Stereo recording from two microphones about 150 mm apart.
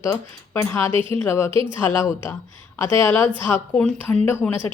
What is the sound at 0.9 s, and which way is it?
Speech, 35° right (ahead or behind).